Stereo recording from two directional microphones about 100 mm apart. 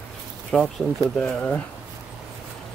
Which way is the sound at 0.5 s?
5° left (ahead or behind).